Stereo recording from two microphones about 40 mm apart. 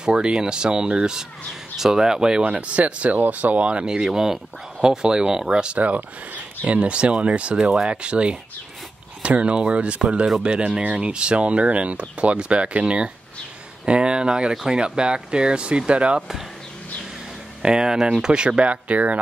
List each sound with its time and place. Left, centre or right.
0.0 s speech: right
2.4 s speech: right
3.6 s speech: right
5.8 s speech: right
7.6 s speech: centre
7.9 s speech: right
16.2 s speech: centre
17.6 s speech: centre; by 19.1 s right